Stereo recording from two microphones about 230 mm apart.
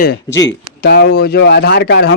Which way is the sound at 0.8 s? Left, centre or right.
Left.